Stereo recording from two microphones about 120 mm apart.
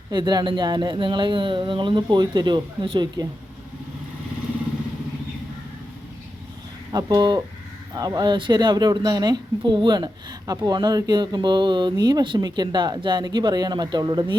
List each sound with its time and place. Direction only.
0.1 s speech: 35° right (ahead or behind)
6.9 s speech: 35° right (ahead or behind)